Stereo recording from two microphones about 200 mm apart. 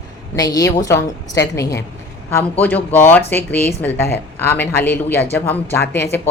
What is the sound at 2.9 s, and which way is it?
A woman's voice, 10° left (ahead or behind).